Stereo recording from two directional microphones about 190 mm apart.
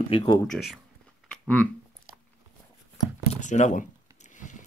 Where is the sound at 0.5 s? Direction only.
Centre (ahead or behind).